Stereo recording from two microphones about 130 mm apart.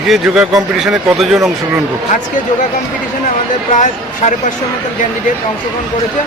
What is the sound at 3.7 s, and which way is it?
Speech, 70° left (ahead or behind).